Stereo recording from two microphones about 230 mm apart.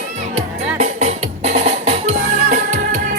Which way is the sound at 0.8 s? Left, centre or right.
Right.